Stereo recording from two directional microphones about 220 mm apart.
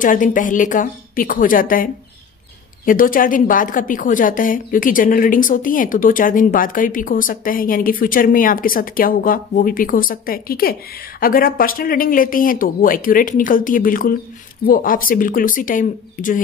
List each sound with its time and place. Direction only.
0.0 s a woman's voice: 35° left (ahead or behind)